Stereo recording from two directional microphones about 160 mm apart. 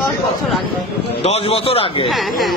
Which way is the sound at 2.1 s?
Centre (ahead or behind).